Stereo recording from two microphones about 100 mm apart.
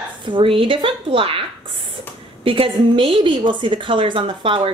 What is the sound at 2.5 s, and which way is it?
Speech, 60° right (ahead or behind).